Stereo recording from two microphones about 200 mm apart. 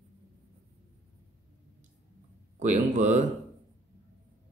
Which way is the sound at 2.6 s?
35° right (ahead or behind).